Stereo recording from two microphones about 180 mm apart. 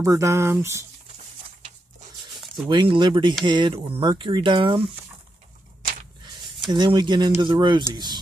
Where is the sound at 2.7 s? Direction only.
25° right (ahead or behind).